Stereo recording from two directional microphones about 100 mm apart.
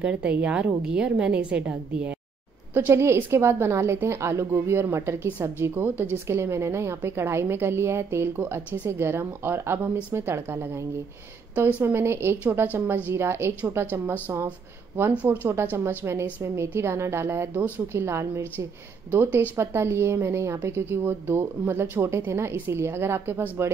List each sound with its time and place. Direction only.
0.0 s a woman's voice: 10° right (ahead or behind)
2.7 s a woman's voice: 25° right (ahead or behind)
15.2 s a woman's voice: 20° right (ahead or behind)